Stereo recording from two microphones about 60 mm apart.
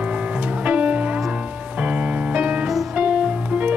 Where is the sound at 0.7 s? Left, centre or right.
Right.